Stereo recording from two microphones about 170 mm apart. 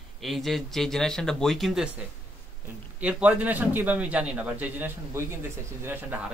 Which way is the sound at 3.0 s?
10° right (ahead or behind).